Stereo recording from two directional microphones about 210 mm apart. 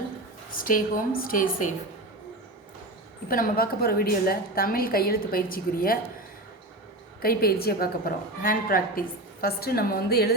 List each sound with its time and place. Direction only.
0.5 s a woman's voice: 40° left (ahead or behind)
3.2 s a woman's voice: 45° left (ahead or behind)
7.2 s a woman's voice: 45° left (ahead or behind)